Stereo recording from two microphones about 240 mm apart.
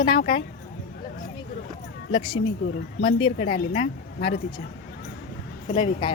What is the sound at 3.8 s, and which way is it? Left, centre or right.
Speech, left.